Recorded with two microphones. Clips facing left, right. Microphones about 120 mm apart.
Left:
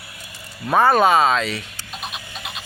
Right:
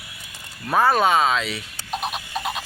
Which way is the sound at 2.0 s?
55° right (ahead or behind).